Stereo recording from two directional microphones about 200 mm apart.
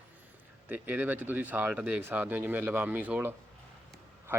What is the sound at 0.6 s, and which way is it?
Speech, 10° right (ahead or behind).